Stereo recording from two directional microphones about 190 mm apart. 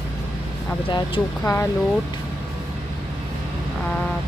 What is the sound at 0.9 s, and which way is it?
Speech, 20° left (ahead or behind).